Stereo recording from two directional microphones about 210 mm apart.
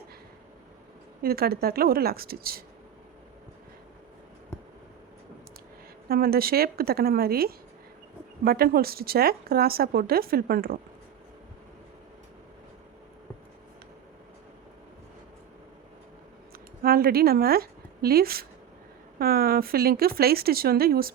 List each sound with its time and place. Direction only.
1.2 s speech: 45° right (ahead or behind)
6.1 s speech: 45° right (ahead or behind)
16.8 s a woman's voice: 45° right (ahead or behind)